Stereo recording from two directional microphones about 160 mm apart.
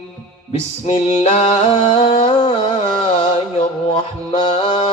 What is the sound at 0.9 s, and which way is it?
Male singing, 45° left (ahead or behind).